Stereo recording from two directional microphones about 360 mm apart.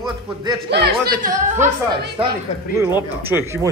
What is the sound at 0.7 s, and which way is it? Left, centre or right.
A woman's voice, right.